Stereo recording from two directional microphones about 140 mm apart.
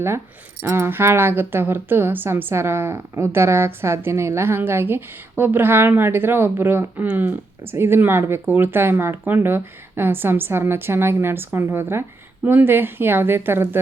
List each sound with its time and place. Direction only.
0.6 s a woman's voice: 15° right (ahead or behind)